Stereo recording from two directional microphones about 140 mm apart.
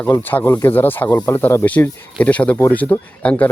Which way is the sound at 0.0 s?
15° left (ahead or behind).